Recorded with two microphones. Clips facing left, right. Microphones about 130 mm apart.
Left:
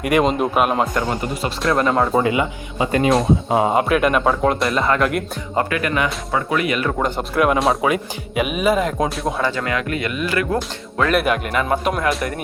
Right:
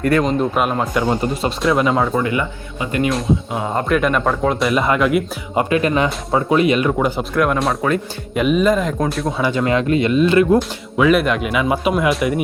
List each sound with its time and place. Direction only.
0.0 s speech: 15° left (ahead or behind)
0.5 s a man's voice: 5° left (ahead or behind)
0.9 s speech: 15° right (ahead or behind)
1.6 s a man's voice: 5° right (ahead or behind)
2.1 s speech: 20° left (ahead or behind)
3.8 s a man's voice: 5° left (ahead or behind)
5.5 s speech: 25° right (ahead or behind)
7.0 s a man's voice: centre (ahead or behind)
9.4 s speech: 20° right (ahead or behind)
10.9 s a man's voice: 5° right (ahead or behind)